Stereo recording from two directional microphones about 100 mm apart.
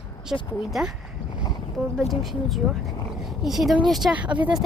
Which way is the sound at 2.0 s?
Centre (ahead or behind).